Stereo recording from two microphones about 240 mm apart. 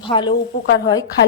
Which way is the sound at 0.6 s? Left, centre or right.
Left.